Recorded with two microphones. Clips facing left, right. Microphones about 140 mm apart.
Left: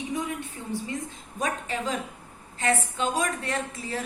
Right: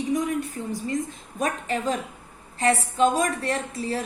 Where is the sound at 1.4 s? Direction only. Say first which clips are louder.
Right 3 dB; 35° right (ahead or behind).